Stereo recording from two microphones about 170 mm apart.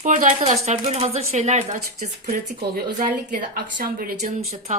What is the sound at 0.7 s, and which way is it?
Speech, 40° right (ahead or behind).